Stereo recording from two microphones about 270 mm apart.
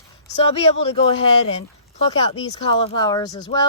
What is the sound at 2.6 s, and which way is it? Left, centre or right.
Speech, centre.